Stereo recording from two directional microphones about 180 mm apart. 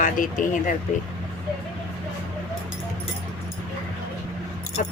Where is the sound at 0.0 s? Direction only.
45° left (ahead or behind).